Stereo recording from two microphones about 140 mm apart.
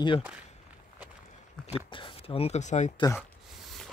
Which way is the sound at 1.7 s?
35° left (ahead or behind).